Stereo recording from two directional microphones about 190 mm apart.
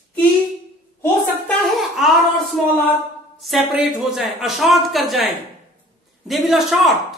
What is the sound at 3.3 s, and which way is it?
Speech, centre (ahead or behind).